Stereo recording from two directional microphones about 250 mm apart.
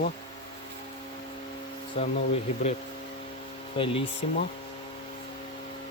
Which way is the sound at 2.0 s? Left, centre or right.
Left.